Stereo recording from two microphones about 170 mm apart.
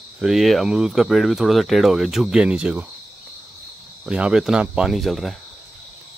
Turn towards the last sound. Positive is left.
turn(degrees=0)  # may be behind; listen again after turning